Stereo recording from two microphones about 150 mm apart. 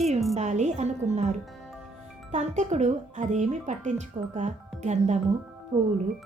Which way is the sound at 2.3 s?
50° right (ahead or behind).